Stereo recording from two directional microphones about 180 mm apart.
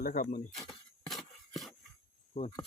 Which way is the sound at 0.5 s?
Centre (ahead or behind).